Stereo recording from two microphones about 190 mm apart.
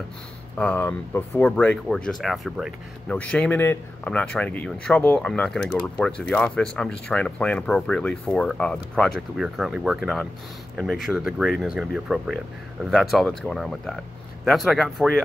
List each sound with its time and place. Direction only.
0.6 s speech: 5° left (ahead or behind)